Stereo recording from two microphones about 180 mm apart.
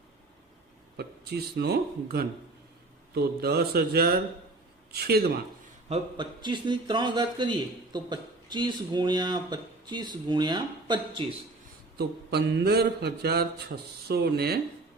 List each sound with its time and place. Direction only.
0.9 s mantra: 65° right (ahead or behind)
5.9 s speech: 25° right (ahead or behind)
11.9 s mantra: 65° right (ahead or behind)